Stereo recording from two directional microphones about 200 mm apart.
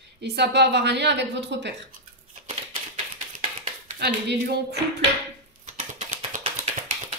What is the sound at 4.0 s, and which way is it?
Speech, 55° right (ahead or behind).